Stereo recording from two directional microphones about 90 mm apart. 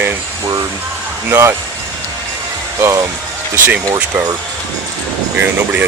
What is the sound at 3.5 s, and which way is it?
Speech, 15° right (ahead or behind).